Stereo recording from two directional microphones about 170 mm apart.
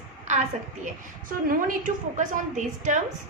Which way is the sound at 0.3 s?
45° right (ahead or behind).